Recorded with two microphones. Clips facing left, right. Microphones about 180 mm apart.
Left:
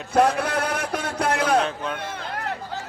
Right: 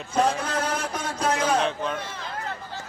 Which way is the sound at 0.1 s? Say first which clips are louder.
Left 4 dB; 65° left (ahead or behind).